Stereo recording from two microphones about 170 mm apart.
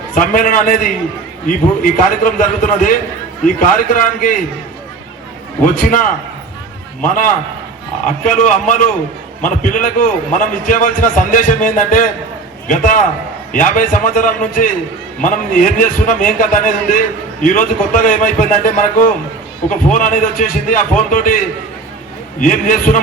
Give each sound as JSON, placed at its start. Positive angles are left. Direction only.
{"t": 0.1, "sound": "a man's voice", "side_deg": 50}
{"t": 5.8, "sound": "a man's voice", "side_deg": 50}